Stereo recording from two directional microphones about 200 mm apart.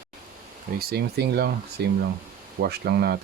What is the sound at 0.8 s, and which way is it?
Speech, 50° right (ahead or behind).